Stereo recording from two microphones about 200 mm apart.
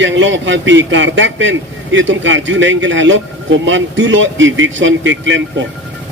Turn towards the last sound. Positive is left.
turn(degrees=-70)  # may be behind; listen again after turning